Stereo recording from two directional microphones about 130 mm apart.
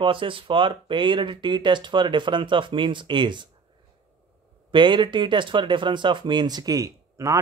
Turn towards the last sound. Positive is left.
turn(degrees=-25)  # may be behind; listen again after turning